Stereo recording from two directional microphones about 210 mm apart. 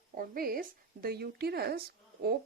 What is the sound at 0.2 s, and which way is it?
Speech, 45° right (ahead or behind).